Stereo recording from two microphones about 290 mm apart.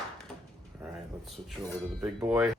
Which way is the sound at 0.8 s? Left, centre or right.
Centre.